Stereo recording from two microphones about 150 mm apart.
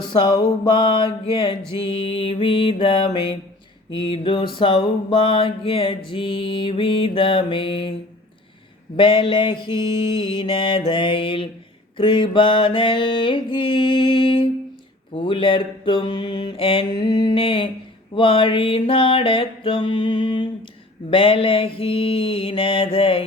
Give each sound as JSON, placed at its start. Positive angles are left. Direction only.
{"t": 0.0, "sound": "music", "side_deg": 30}
{"t": 9.0, "sound": "music", "side_deg": 35}